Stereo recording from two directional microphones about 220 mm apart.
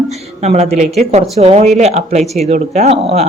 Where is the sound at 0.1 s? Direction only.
30° right (ahead or behind).